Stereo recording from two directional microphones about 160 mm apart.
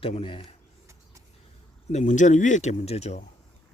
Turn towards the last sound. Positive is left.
turn(degrees=40)  # may be behind; listen again after turning